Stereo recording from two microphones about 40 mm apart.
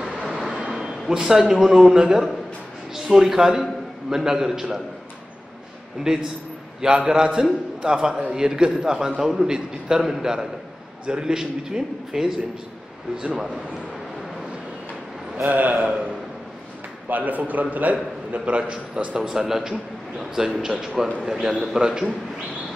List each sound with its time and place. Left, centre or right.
0.0 s vehicle: centre
1.0 s a man's voice: centre
6.0 s a man's voice: centre
15.4 s a man's voice: right
17.1 s a man's voice: right
19.1 s a man's voice: centre
21.3 s a man's voice: centre